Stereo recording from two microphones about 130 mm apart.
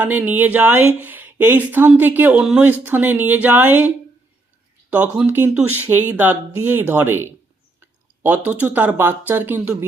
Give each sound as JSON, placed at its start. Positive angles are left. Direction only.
{"t": 0.0, "sound": "speech", "side_deg": -10}
{"t": 8.4, "sound": "speech", "side_deg": -10}